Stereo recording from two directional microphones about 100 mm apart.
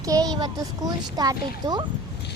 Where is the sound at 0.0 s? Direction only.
35° right (ahead or behind).